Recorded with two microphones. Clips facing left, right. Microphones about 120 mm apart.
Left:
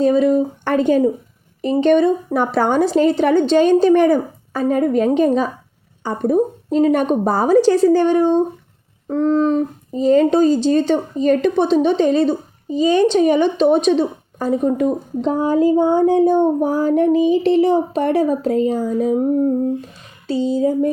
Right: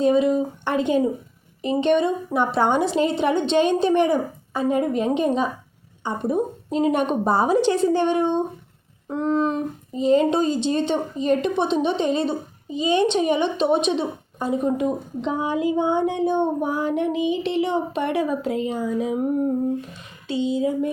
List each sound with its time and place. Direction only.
0.0 s a woman's voice: 40° left (ahead or behind)
20.2 s a woman's voice: 35° left (ahead or behind)